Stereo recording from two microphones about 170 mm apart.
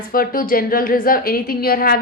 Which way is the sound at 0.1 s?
55° left (ahead or behind).